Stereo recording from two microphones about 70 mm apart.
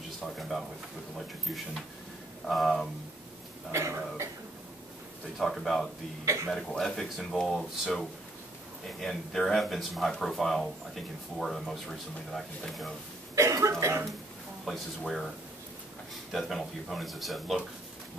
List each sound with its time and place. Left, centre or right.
0.2 s a sound: centre
2.4 s speech: centre
3.7 s cough: right
5.4 s speech: centre
9.0 s speech: centre
13.3 s speech: right
14.6 s speech: centre
16.3 s speech: centre